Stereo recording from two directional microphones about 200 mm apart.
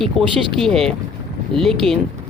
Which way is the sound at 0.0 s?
Centre (ahead or behind).